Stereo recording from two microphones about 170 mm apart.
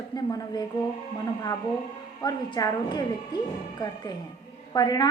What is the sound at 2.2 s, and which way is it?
A woman's voice, 20° left (ahead or behind).